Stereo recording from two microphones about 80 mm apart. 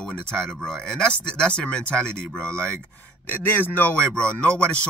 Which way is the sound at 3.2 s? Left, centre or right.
Left.